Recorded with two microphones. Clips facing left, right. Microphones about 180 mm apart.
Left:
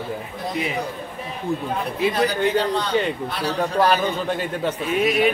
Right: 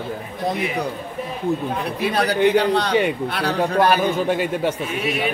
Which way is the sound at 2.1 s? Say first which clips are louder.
Right 6 dB; 70° right (ahead or behind).